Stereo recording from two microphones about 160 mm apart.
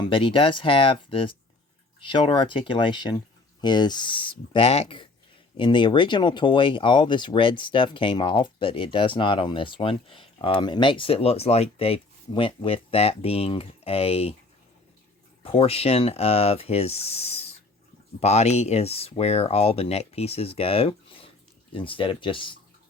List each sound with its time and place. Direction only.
0.0 s speech: 30° left (ahead or behind)
15.4 s speech: 40° left (ahead or behind)